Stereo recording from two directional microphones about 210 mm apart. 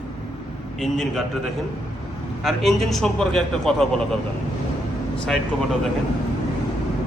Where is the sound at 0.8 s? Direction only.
Centre (ahead or behind).